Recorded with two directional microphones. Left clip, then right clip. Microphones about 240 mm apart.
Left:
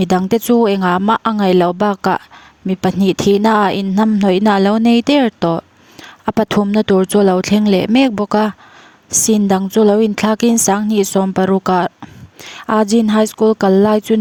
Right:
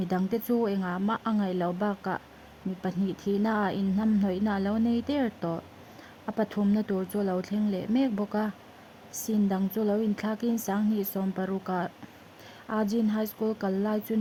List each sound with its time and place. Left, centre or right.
0.0 s a woman's voice: left